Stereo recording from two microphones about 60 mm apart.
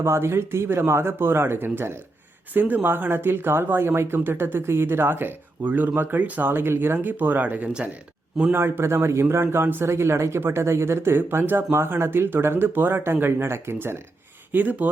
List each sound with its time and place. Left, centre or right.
0.0 s speech: right
8.5 s speech: right
14.5 s speech: right